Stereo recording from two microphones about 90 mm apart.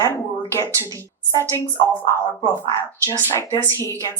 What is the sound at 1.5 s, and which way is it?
Speech, 30° left (ahead or behind).